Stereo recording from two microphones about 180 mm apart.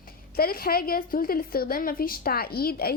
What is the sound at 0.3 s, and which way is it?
A woman's voice, 55° left (ahead or behind).